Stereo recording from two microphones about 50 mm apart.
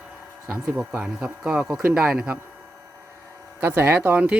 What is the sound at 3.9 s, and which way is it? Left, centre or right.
Speech, right.